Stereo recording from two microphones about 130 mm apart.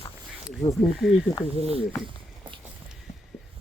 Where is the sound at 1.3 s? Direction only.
25° left (ahead or behind).